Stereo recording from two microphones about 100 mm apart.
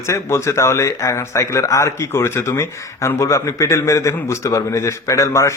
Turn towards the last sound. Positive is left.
turn(degrees=30)  # may be behind; listen again after turning